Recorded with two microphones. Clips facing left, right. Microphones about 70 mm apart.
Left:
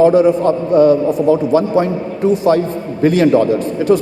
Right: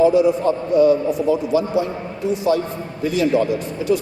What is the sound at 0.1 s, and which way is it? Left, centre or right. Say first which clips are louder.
A man's voice: left 5 dB; left.